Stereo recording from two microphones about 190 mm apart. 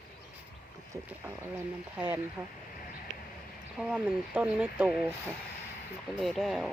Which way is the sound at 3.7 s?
5° right (ahead or behind).